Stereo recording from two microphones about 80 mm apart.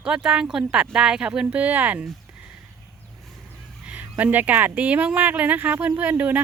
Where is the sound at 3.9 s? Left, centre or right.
Centre.